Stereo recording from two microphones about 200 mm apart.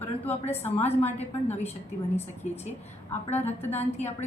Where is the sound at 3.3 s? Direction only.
10° left (ahead or behind).